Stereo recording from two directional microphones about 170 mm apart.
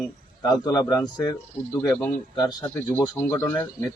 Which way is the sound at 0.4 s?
25° left (ahead or behind).